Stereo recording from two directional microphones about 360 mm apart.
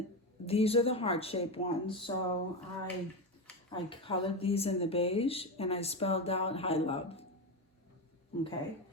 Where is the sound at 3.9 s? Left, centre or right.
Centre.